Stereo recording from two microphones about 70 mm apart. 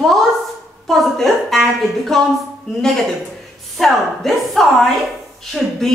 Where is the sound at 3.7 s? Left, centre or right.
Centre.